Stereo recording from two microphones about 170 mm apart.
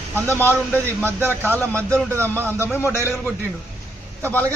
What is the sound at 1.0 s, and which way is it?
Speech, 15° right (ahead or behind).